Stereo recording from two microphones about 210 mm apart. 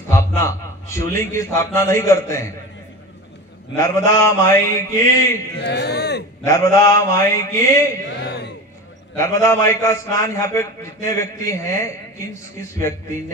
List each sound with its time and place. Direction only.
0.1 s a man's voice: 15° left (ahead or behind)
3.7 s a man's voice: 15° left (ahead or behind)
5.6 s speech: 55° left (ahead or behind)
6.4 s a man's voice: 15° left (ahead or behind)
9.1 s a man's voice: 15° left (ahead or behind)